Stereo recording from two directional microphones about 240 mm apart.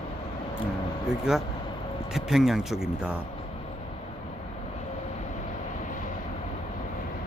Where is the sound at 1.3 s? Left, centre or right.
Centre.